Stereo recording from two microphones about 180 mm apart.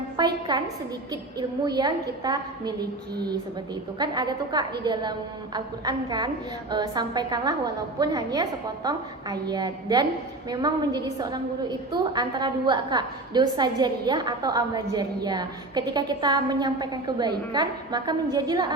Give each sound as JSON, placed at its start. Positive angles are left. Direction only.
{"t": 0.2, "sound": "a woman's voice", "side_deg": -25}
{"t": 3.9, "sound": "a woman's voice", "side_deg": -25}